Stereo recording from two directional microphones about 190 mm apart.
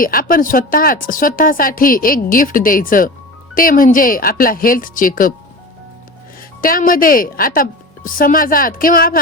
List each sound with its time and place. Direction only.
0.0 s a woman's voice: 50° left (ahead or behind)
6.6 s a woman's voice: 45° left (ahead or behind)